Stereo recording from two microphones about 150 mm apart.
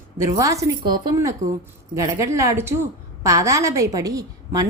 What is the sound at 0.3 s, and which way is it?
A woman's voice, 20° right (ahead or behind).